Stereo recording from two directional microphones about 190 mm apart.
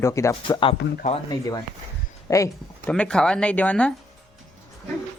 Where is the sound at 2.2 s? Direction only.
15° left (ahead or behind).